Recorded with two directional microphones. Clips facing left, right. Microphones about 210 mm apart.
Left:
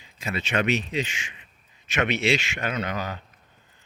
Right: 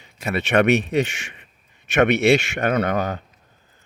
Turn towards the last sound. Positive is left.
turn(degrees=-55)  # may be behind; listen again after turning